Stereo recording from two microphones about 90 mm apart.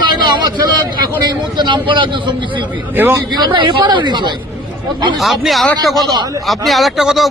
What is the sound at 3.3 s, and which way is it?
Speech, 60° right (ahead or behind).